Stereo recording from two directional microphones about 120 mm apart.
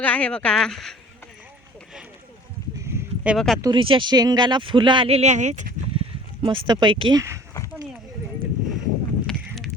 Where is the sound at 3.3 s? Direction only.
Centre (ahead or behind).